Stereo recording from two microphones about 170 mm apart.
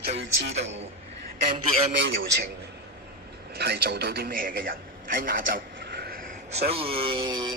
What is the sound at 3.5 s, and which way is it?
A man's voice, 70° right (ahead or behind).